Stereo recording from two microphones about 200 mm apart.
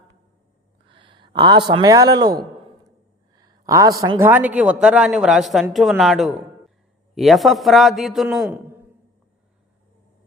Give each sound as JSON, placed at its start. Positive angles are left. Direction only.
{"t": 0.9, "sound": "speech", "side_deg": -25}
{"t": 3.7, "sound": "a man's voice", "side_deg": -15}